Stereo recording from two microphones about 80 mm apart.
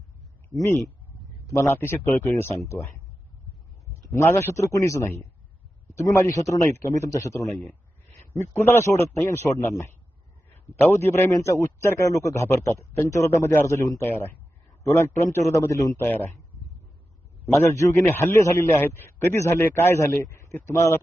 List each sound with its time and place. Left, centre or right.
1.5 s speech: left
2.3 s a man's voice: left
4.1 s a man's voice: left
6.1 s a man's voice: left
14.1 s a man's voice: left
16.0 s speech: left
17.7 s a man's voice: left